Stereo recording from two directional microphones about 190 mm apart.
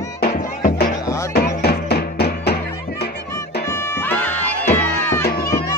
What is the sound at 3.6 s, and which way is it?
Music, 15° left (ahead or behind).